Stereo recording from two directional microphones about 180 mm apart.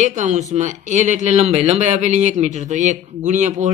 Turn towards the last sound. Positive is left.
turn(degrees=-40)  # may be behind; listen again after turning